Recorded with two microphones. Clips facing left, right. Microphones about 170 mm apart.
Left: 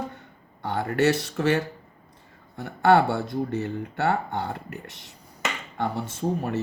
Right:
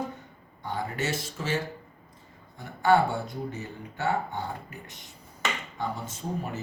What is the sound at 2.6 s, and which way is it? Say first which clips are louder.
Speech: left 3 dB; 70° left (ahead or behind).